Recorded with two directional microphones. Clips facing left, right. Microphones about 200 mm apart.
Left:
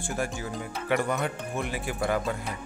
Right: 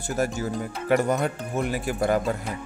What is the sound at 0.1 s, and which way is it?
Speech, 40° right (ahead or behind).